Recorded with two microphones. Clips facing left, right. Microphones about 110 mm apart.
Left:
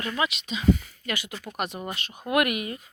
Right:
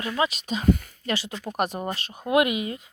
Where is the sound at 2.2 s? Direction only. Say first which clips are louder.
Right 3 dB; 20° right (ahead or behind).